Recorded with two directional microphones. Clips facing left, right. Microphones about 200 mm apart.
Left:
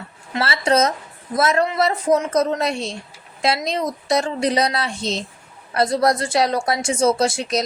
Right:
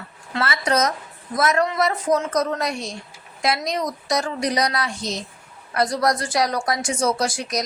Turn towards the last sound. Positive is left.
turn(degrees=25)  # may be behind; listen again after turning